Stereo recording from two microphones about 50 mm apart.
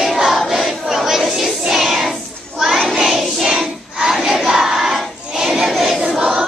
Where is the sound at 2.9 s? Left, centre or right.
Centre.